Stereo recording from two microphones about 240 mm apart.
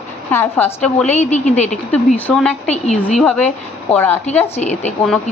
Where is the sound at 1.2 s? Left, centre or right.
Left.